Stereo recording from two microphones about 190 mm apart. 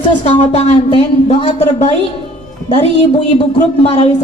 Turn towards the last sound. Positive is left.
turn(degrees=35)  # may be behind; listen again after turning